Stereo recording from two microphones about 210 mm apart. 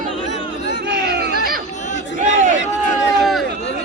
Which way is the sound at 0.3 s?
55° left (ahead or behind).